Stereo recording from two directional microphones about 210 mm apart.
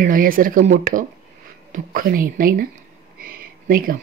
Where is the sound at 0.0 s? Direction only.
40° right (ahead or behind).